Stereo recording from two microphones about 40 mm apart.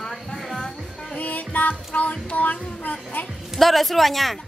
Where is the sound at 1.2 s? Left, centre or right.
Left.